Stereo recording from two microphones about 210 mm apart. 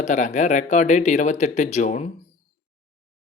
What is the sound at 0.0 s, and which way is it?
Speech, 35° left (ahead or behind).